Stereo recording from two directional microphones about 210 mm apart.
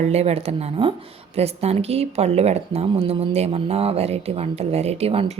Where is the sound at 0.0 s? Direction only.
30° right (ahead or behind).